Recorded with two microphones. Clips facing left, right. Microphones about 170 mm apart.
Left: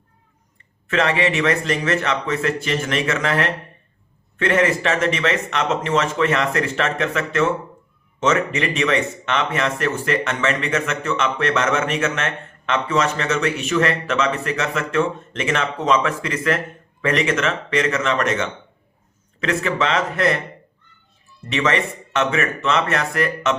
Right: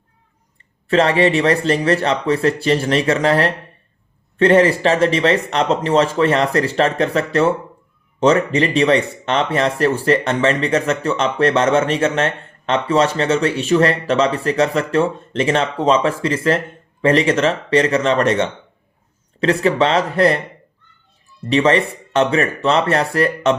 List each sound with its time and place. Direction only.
0.9 s speech: 35° right (ahead or behind)
21.5 s speech: 30° right (ahead or behind)